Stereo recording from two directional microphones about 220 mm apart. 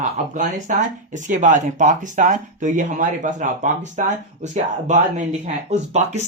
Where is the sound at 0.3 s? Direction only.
35° right (ahead or behind).